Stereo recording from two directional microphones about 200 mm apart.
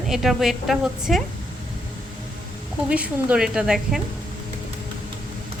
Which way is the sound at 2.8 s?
5° right (ahead or behind).